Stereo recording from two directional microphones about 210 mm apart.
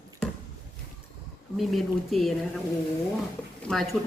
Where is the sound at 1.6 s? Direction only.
Centre (ahead or behind).